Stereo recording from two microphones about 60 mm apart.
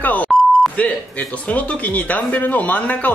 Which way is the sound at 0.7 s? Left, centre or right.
Left.